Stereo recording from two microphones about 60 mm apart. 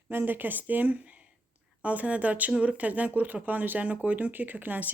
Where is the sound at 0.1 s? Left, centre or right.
Right.